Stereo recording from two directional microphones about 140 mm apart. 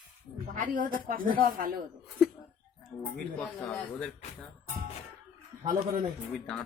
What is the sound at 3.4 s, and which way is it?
Speech, 10° left (ahead or behind).